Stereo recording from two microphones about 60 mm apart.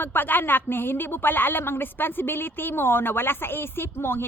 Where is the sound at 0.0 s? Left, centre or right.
Left.